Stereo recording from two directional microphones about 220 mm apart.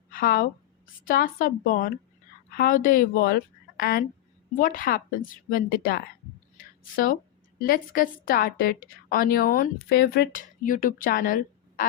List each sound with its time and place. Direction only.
0.1 s a woman's voice: 45° left (ahead or behind)